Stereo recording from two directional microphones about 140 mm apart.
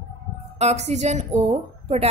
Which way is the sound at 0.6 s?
55° right (ahead or behind).